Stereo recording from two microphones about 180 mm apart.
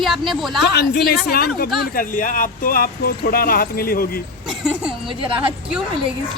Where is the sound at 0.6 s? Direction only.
65° left (ahead or behind).